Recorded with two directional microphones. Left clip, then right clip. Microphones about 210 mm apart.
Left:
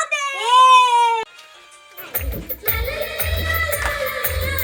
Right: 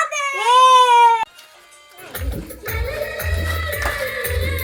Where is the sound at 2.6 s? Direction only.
50° left (ahead or behind).